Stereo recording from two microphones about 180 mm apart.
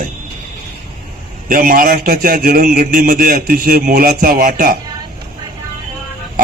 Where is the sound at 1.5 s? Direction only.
50° right (ahead or behind).